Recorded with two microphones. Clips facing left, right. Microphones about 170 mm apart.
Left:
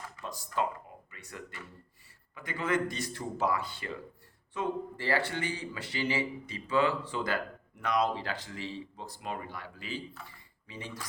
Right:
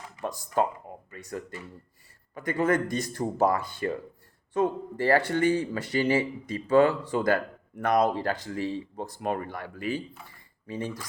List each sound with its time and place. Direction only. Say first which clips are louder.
0.2 s speech: right 6 dB; 50° right (ahead or behind)